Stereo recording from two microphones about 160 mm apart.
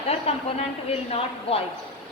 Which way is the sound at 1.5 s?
35° left (ahead or behind).